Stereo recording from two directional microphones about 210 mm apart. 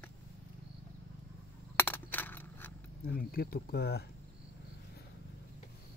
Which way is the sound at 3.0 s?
45° left (ahead or behind).